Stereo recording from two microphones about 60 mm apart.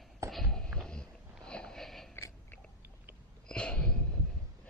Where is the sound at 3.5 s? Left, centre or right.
Centre.